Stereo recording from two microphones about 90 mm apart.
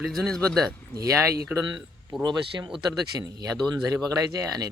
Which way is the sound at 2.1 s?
5° right (ahead or behind).